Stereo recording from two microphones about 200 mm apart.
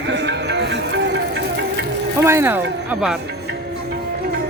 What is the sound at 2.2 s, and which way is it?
Speech, 10° right (ahead or behind).